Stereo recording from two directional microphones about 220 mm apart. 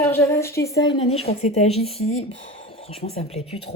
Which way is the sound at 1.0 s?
25° left (ahead or behind).